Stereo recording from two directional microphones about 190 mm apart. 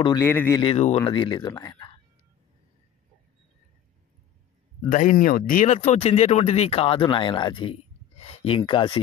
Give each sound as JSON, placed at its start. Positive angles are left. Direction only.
{"t": 0.0, "sound": "speech", "side_deg": 15}
{"t": 0.6, "sound": "speech", "side_deg": 30}
{"t": 4.8, "sound": "speech", "side_deg": 45}